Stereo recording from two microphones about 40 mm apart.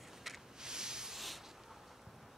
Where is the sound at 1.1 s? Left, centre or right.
Centre.